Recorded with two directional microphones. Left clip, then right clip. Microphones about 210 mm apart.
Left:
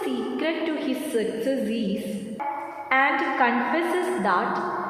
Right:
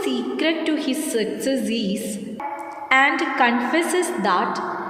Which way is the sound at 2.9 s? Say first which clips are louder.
Right 4 dB; 40° right (ahead or behind).